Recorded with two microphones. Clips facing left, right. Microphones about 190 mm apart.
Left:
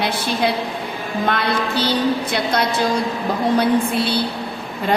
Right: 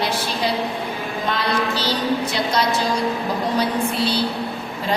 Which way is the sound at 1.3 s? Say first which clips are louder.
Even; 60° left (ahead or behind).